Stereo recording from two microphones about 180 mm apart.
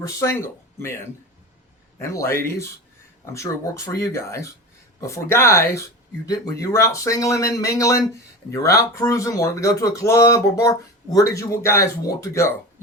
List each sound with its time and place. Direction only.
0.0 s speech: 15° left (ahead or behind)